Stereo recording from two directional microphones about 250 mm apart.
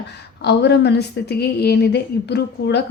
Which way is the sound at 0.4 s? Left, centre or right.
Left.